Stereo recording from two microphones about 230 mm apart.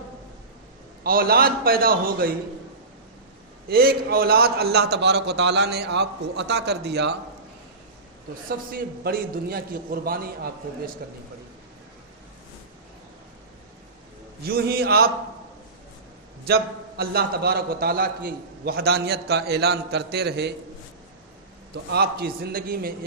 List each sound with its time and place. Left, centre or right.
1.0 s a man's voice: right
3.7 s a man's voice: right
8.4 s a man's voice: right
14.4 s a man's voice: right
16.5 s a man's voice: right
21.9 s a man's voice: right